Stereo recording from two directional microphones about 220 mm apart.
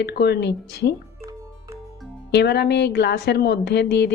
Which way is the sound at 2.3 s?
50° left (ahead or behind).